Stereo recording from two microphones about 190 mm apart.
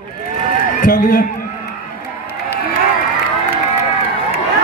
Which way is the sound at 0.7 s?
45° left (ahead or behind).